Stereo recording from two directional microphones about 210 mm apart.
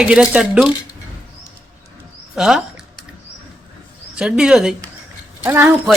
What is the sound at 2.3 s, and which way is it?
Typing, centre (ahead or behind).